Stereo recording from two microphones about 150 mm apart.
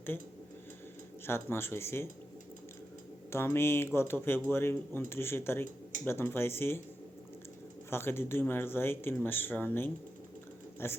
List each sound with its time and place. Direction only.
1.3 s speech: 15° left (ahead or behind)
3.2 s speech: 15° left (ahead or behind)
7.9 s speech: 15° left (ahead or behind)